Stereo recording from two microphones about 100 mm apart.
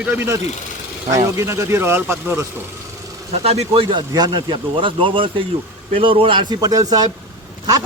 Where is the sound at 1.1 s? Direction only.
30° right (ahead or behind).